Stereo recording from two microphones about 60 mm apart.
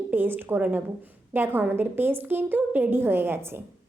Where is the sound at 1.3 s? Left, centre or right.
Right.